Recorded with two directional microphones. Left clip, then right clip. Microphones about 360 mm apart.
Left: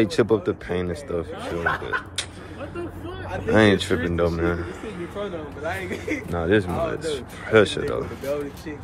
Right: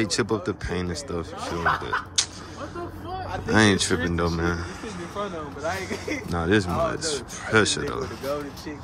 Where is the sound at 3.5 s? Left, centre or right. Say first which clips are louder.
Left 2 dB; centre.